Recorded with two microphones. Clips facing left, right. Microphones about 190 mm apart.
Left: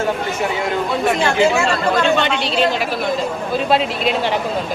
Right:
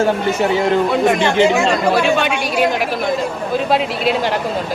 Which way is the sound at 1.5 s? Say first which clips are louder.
Right 2 dB; 15° right (ahead or behind).